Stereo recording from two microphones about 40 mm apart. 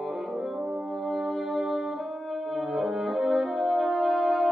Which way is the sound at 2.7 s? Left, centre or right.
Centre.